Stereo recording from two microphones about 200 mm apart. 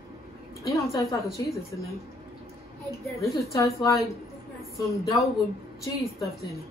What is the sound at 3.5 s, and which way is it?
A woman's voice, 15° left (ahead or behind).